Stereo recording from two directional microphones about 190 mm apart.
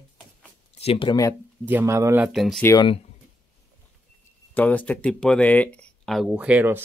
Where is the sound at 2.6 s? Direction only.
25° left (ahead or behind).